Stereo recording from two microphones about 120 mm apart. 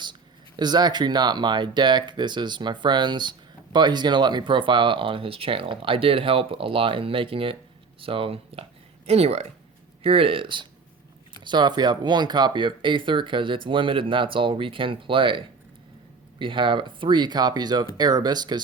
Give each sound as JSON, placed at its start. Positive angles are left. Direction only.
{"t": 0.0, "sound": "speech", "side_deg": -40}
{"t": 9.0, "sound": "speech", "side_deg": -60}
{"t": 10.0, "sound": "speech", "side_deg": -50}